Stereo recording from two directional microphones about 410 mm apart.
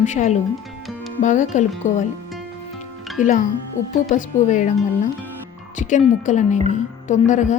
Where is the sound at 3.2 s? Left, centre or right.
Centre.